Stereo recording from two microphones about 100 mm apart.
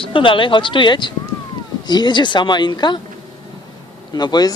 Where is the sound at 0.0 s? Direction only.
60° left (ahead or behind).